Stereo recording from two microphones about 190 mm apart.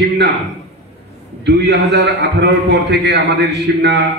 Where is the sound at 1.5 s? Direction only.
65° right (ahead or behind).